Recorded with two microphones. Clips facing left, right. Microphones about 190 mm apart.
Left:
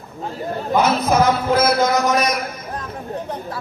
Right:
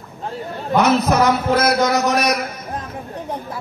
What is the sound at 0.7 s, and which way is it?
A man's voice, 70° right (ahead or behind).